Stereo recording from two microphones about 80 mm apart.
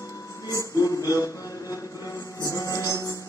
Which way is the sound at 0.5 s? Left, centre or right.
Left.